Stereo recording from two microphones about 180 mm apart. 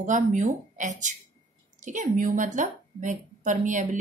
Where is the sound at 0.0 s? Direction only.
45° right (ahead or behind).